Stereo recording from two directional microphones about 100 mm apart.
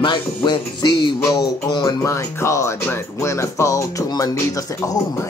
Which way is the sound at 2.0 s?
30° left (ahead or behind).